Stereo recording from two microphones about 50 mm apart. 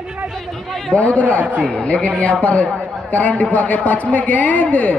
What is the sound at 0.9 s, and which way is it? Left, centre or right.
A man's voice, left.